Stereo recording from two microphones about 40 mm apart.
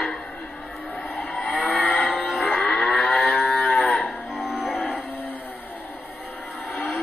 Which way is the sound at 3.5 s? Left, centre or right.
Left.